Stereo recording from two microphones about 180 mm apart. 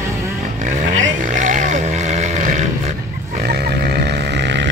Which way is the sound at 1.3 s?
45° right (ahead or behind).